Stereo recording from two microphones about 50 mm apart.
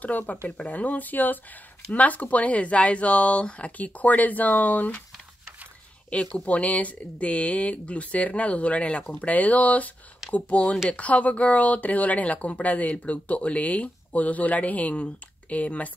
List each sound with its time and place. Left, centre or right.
0.0 s speech: left
6.0 s speech: left